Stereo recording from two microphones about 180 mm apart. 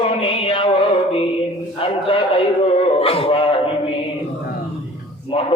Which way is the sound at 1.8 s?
30° left (ahead or behind).